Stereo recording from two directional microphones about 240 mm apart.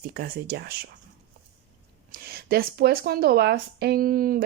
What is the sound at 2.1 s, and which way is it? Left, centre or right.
Speech, right.